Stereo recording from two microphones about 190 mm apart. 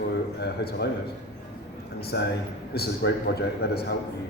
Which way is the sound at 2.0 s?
55° left (ahead or behind).